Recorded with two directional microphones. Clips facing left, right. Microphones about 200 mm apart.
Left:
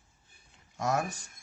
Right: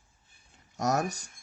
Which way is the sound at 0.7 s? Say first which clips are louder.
Right 2 dB; 40° right (ahead or behind).